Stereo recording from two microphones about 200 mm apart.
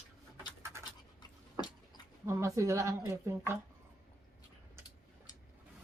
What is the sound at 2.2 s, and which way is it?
Speech, 15° right (ahead or behind).